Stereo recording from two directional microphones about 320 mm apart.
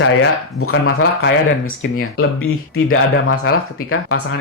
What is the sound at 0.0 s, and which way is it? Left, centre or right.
Speech, left.